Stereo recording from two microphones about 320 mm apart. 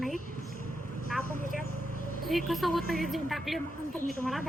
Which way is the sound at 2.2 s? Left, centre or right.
Centre.